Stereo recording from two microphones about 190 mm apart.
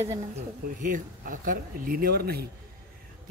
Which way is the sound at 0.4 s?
45° right (ahead or behind).